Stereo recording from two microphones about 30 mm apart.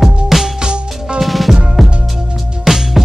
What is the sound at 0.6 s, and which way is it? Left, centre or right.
Music, right.